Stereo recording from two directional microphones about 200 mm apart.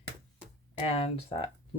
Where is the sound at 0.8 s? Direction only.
30° left (ahead or behind).